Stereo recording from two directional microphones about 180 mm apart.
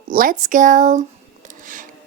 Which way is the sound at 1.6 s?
45° right (ahead or behind).